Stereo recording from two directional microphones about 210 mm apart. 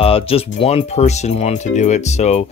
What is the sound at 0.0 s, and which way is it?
Speech, 25° left (ahead or behind).